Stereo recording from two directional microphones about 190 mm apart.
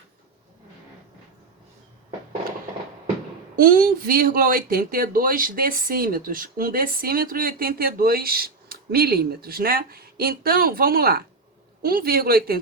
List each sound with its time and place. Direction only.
3.5 s speech: 50° right (ahead or behind)